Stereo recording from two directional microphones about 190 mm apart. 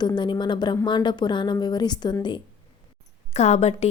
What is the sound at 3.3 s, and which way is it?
Speech, 35° left (ahead or behind).